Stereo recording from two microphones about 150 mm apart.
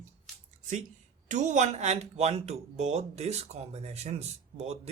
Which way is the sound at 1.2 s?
55° right (ahead or behind).